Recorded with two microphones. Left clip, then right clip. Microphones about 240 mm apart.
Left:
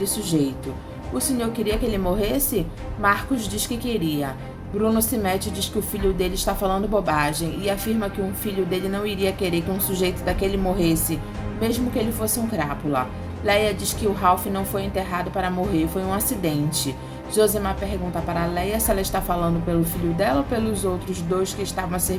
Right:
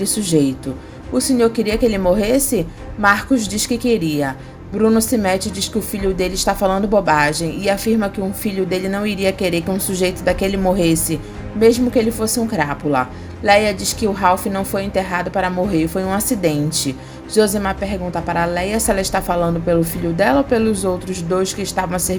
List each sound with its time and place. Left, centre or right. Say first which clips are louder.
0.0 s a woman's voice: right 6 dB; right